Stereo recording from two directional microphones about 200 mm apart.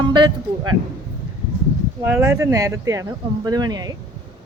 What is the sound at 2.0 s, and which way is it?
Speech, 10° right (ahead or behind).